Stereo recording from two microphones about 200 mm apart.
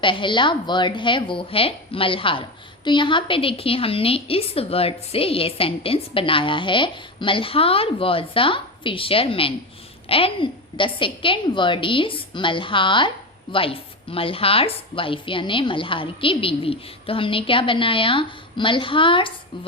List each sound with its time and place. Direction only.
0.0 s a woman's voice: 25° left (ahead or behind)